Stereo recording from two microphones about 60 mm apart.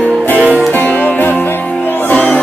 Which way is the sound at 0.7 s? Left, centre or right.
Left.